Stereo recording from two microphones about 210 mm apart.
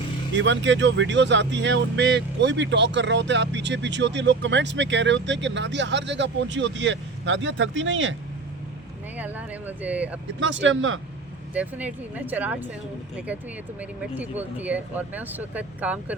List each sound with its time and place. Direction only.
0.3 s speech: 60° right (ahead or behind)
9.1 s speech: 5° right (ahead or behind)
10.4 s speech: 65° right (ahead or behind)
11.5 s speech: 5° right (ahead or behind)
14.0 s speech: 5° right (ahead or behind)